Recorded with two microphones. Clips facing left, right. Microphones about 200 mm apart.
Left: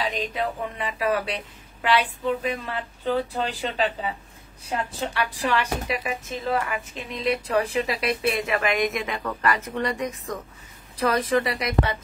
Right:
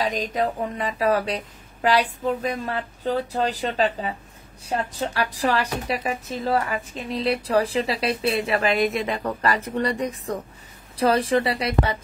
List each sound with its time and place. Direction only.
0.0 s a woman's voice: 40° right (ahead or behind)